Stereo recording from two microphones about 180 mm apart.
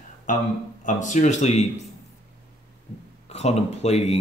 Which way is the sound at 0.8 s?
45° left (ahead or behind).